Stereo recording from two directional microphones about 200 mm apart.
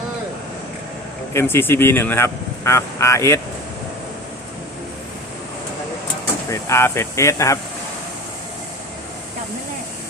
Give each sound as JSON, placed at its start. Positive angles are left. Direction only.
{"t": 1.3, "sound": "speech", "side_deg": 10}
{"t": 6.5, "sound": "speech", "side_deg": 15}